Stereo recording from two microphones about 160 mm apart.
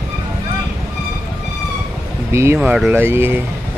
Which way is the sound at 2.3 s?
15° right (ahead or behind).